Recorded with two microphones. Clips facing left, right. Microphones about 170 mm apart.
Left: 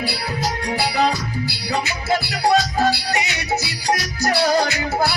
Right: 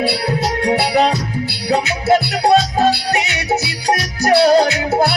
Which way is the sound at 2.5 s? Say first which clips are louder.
Right 4 dB; 25° right (ahead or behind).